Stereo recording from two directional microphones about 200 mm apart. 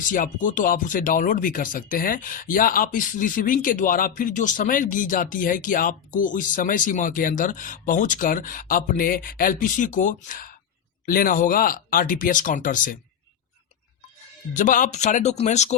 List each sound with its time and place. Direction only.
0.1 s speech: 40° left (ahead or behind)
14.5 s speech: 40° left (ahead or behind)